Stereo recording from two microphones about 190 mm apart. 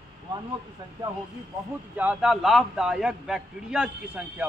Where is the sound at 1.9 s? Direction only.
5° right (ahead or behind).